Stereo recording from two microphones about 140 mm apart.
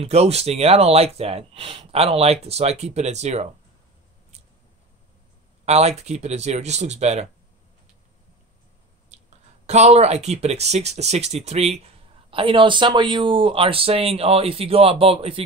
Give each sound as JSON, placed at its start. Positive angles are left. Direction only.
{"t": 0.0, "sound": "speech", "side_deg": -50}
{"t": 5.7, "sound": "speech", "side_deg": -50}
{"t": 9.7, "sound": "speech", "side_deg": -50}
{"t": 12.3, "sound": "speech", "side_deg": -40}